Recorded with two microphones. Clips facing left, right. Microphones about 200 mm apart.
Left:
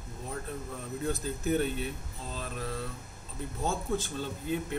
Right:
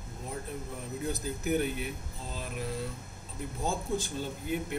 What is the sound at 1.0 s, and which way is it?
Speech, 15° right (ahead or behind).